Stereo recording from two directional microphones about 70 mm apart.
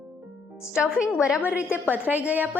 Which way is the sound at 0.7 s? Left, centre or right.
Centre.